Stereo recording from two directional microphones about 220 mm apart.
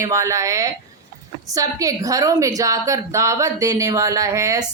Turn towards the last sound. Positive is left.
turn(degrees=-15)  # may be behind; listen again after turning